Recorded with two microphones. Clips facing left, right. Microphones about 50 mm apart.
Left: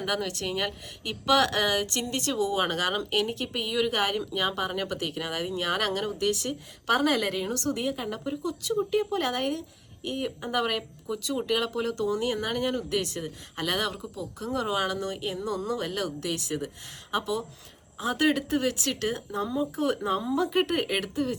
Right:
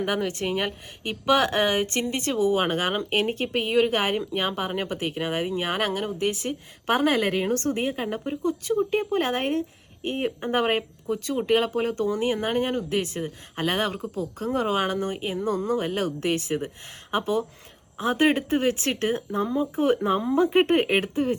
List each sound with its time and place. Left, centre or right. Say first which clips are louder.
0.0 s speech: right 4 dB; right